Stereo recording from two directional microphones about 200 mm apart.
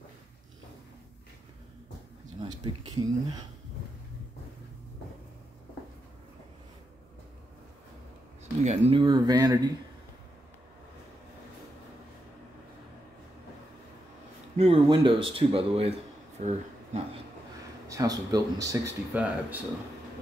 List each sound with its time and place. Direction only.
2.4 s speech: 20° right (ahead or behind)
8.6 s speech: 30° right (ahead or behind)
14.6 s speech: 25° right (ahead or behind)
17.8 s speech: 15° right (ahead or behind)